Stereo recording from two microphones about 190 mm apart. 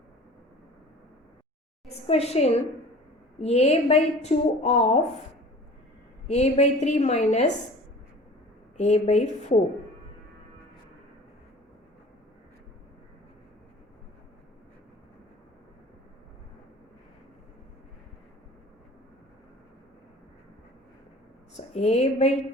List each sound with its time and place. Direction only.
1.9 s a woman's voice: 35° left (ahead or behind)
6.2 s a woman's voice: 35° left (ahead or behind)
8.8 s a woman's voice: 35° left (ahead or behind)
21.5 s speech: 35° left (ahead or behind)